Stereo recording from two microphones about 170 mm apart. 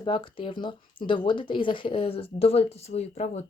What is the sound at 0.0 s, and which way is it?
Speech, 30° left (ahead or behind).